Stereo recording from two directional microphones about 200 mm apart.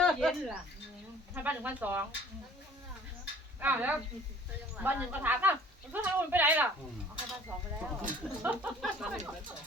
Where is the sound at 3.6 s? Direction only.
10° right (ahead or behind).